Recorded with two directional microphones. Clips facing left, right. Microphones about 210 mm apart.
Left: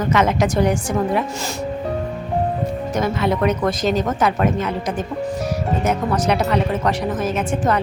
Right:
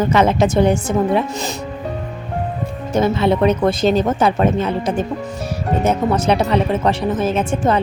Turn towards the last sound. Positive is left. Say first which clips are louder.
# right 3 dB
turn(degrees=-30)  # may be behind; listen again after turning